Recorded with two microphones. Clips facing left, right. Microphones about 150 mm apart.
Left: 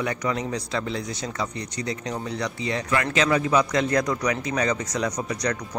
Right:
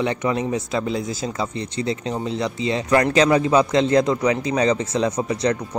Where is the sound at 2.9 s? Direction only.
35° right (ahead or behind).